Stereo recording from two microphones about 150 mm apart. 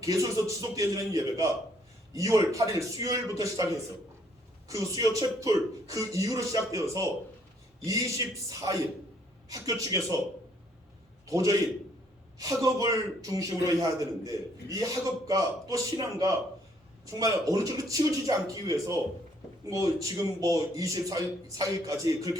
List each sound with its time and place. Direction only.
0.0 s a man's voice: 20° right (ahead or behind)
4.7 s a man's voice: 20° right (ahead or behind)
9.8 s a man's voice: 20° right (ahead or behind)
11.3 s a man's voice: 25° right (ahead or behind)
20.0 s a man's voice: 20° right (ahead or behind)